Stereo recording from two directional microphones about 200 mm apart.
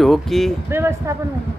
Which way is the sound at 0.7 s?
15° right (ahead or behind).